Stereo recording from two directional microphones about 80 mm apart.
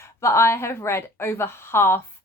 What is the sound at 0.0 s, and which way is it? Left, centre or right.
A woman's voice, left.